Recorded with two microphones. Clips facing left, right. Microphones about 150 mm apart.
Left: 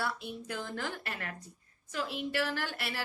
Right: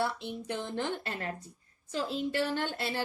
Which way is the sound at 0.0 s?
25° right (ahead or behind).